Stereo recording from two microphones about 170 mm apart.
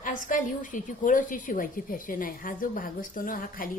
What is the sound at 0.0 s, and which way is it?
A woman's voice, 50° left (ahead or behind).